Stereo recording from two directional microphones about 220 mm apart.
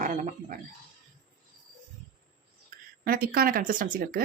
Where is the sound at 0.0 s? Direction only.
35° right (ahead or behind).